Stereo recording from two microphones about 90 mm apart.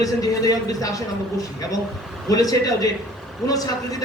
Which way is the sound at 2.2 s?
45° left (ahead or behind).